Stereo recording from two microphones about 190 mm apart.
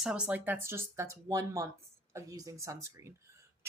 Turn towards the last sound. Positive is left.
turn(degrees=-15)  # may be behind; listen again after turning